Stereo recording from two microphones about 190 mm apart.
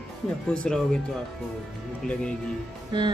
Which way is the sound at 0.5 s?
5° left (ahead or behind).